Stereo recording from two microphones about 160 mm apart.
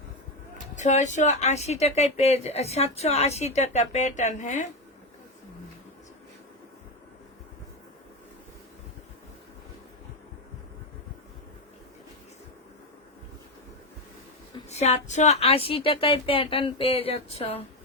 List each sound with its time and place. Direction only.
0.8 s speech: 50° left (ahead or behind)
14.7 s a woman's voice: 45° left (ahead or behind)